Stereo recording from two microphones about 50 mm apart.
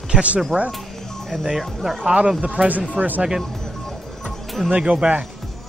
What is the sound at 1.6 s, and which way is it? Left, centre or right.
Speech, centre.